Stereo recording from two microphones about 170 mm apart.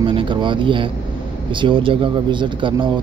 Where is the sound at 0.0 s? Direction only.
30° right (ahead or behind).